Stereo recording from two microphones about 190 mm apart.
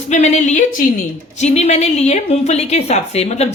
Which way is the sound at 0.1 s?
40° left (ahead or behind).